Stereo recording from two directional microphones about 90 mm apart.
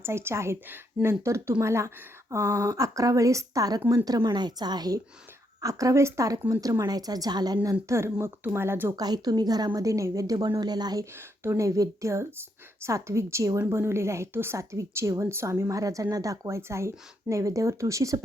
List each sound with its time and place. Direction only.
0.0 s a woman's voice: 30° right (ahead or behind)
4.3 s a woman's voice: 50° right (ahead or behind)
5.6 s a woman's voice: 40° right (ahead or behind)
9.0 s a woman's voice: 45° right (ahead or behind)
11.2 s a woman's voice: 30° right (ahead or behind)